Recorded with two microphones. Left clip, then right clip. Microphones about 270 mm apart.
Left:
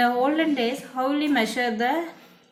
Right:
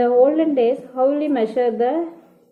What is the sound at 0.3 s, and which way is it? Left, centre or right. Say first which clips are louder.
A woman's voice: right 6 dB; left.